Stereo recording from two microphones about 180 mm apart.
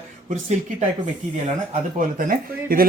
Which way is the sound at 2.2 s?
50° right (ahead or behind).